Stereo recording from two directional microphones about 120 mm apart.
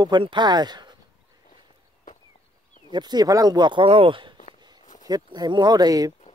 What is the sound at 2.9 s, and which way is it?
Speech, 35° right (ahead or behind).